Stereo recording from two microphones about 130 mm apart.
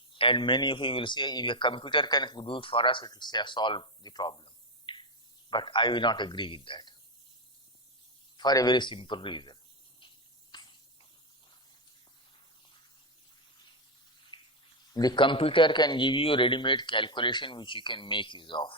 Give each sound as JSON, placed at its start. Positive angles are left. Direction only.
{"t": 0.1, "sound": "speech", "side_deg": 40}
{"t": 8.4, "sound": "speech", "side_deg": 35}
{"t": 10.5, "sound": "spray", "side_deg": 35}
{"t": 14.3, "sound": "a sound", "side_deg": 35}
{"t": 14.9, "sound": "speech", "side_deg": 35}